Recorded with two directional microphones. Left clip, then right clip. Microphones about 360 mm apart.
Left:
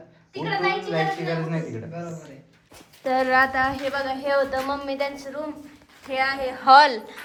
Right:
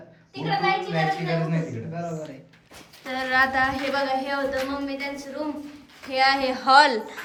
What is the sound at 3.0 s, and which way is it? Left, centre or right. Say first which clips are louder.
A woman's voice: left 3 dB; centre.